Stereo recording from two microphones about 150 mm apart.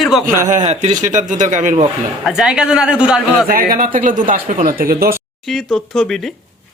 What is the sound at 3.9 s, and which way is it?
Speech, 60° right (ahead or behind).